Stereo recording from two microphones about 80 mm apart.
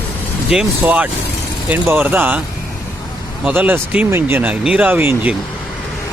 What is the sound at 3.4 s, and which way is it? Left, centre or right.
Speech, right.